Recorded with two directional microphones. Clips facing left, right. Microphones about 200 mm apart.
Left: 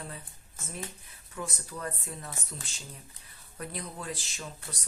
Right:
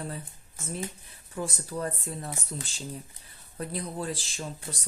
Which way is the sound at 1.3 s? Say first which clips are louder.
Right 6 dB; 35° right (ahead or behind).